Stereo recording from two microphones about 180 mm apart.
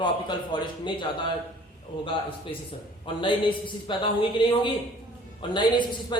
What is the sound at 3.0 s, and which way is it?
A woman's voice, 30° left (ahead or behind).